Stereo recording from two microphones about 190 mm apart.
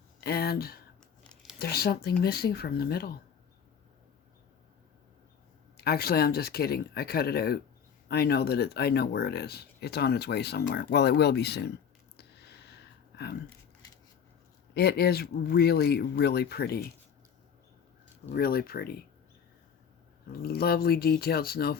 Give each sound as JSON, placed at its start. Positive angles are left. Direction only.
{"t": 0.2, "sound": "speech", "side_deg": 55}
{"t": 1.2, "sound": "a sound", "side_deg": 5}
{"t": 1.5, "sound": "speech", "side_deg": 55}
{"t": 5.7, "sound": "speech", "side_deg": 55}
{"t": 12.1, "sound": "a sound", "side_deg": 60}
{"t": 14.7, "sound": "speech", "side_deg": 55}
{"t": 18.3, "sound": "speech", "side_deg": 50}
{"t": 20.4, "sound": "speech", "side_deg": 55}